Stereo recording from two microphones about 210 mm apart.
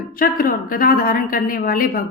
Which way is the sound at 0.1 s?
40° left (ahead or behind).